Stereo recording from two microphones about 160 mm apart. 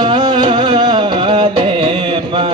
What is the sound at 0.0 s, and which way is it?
Music, 35° right (ahead or behind).